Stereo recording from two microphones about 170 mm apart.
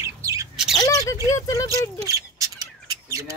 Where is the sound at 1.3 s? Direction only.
20° left (ahead or behind).